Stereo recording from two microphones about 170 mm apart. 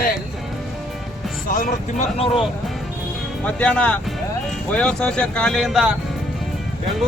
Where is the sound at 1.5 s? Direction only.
45° left (ahead or behind).